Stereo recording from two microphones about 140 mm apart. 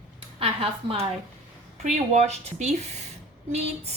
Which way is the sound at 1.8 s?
55° right (ahead or behind).